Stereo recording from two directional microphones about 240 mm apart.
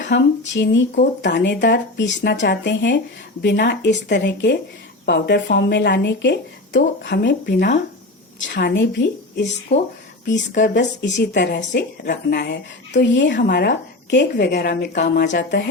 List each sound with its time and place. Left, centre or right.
0.0 s a woman's voice: left
8.7 s a woman's voice: left